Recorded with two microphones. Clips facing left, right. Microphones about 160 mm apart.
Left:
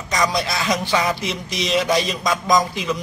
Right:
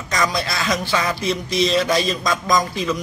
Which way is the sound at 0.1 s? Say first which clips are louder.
Left 1 dB; 20° left (ahead or behind).